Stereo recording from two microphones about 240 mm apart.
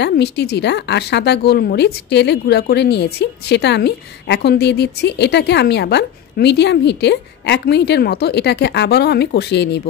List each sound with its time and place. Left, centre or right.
0.0 s speech: left